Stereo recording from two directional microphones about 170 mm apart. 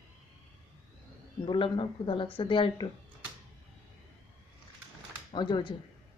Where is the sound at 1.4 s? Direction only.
30° left (ahead or behind).